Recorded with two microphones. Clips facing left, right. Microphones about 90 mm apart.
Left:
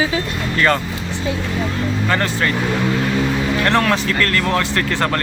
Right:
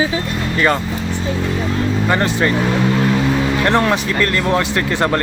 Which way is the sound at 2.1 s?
20° right (ahead or behind).